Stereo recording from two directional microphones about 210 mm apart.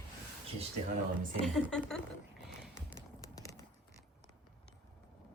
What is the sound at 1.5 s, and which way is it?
Speech, centre (ahead or behind).